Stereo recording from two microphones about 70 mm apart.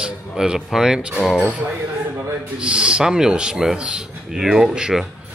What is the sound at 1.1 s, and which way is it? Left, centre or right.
Speech, centre.